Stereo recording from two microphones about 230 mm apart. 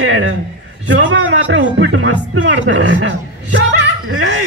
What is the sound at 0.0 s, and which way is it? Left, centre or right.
A man's voice, right.